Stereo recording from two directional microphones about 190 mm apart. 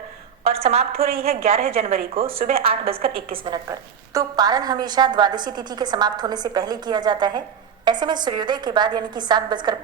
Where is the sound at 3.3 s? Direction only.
20° right (ahead or behind).